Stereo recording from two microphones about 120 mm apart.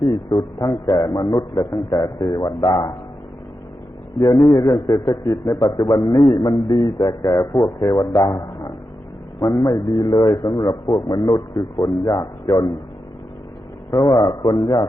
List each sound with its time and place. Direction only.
0.0 s a man's voice: 45° left (ahead or behind)
4.2 s a man's voice: 45° left (ahead or behind)
13.9 s a man's voice: 45° left (ahead or behind)